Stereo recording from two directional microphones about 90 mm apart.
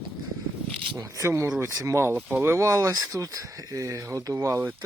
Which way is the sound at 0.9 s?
35° right (ahead or behind).